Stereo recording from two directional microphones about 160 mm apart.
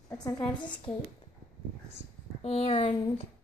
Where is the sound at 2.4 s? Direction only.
40° left (ahead or behind).